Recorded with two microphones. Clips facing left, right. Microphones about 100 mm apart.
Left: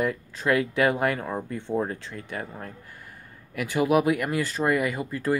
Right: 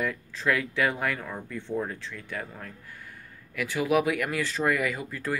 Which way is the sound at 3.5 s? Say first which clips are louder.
Left 3 dB; 50° left (ahead or behind).